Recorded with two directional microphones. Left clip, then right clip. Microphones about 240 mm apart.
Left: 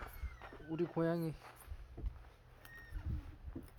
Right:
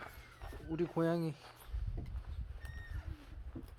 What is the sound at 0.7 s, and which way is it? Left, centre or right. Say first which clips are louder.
Speech: right 2 dB; centre.